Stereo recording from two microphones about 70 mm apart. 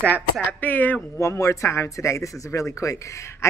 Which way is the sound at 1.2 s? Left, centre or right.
Left.